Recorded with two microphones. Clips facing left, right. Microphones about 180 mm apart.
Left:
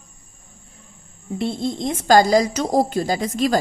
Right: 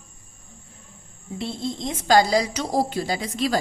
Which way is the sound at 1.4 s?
55° left (ahead or behind).